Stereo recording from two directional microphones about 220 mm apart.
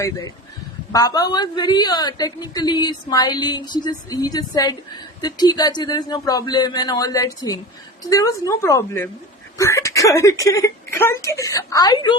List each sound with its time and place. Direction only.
0.9 s a woman's voice: 15° left (ahead or behind)